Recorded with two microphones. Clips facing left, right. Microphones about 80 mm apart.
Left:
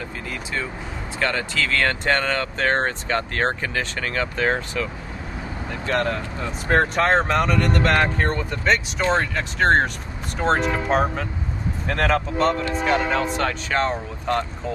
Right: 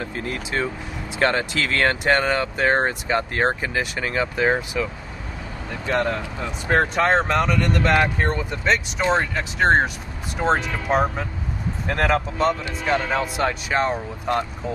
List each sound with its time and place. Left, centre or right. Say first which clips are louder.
0.0 s vehicle: right 3 dB; right
1.2 s speech: right 3 dB; right
5.9 s speech: right 1 dB; centre